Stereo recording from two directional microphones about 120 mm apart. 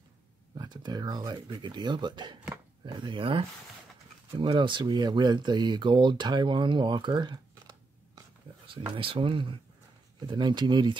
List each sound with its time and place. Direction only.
0.6 s speech: 35° right (ahead or behind)
8.9 s speech: 45° right (ahead or behind)